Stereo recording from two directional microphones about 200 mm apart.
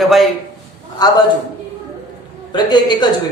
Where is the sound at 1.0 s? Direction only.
20° left (ahead or behind).